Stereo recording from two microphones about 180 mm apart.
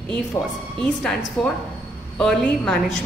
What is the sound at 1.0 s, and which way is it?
A woman's voice, centre (ahead or behind).